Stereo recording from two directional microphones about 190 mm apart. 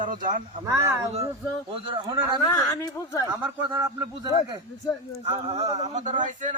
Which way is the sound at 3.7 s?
20° right (ahead or behind).